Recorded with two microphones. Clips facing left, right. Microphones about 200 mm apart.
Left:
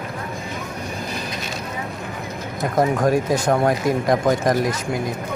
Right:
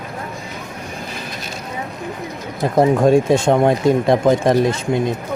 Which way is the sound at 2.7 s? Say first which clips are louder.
Right 5 dB; 25° right (ahead or behind).